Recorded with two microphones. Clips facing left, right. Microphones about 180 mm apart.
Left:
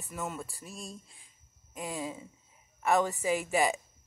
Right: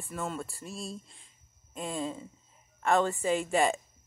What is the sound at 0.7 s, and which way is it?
Speech, 35° right (ahead or behind).